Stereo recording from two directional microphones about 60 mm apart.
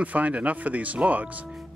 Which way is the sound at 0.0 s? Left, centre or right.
Right.